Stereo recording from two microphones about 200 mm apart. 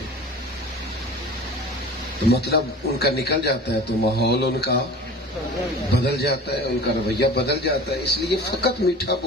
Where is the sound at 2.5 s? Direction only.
55° left (ahead or behind).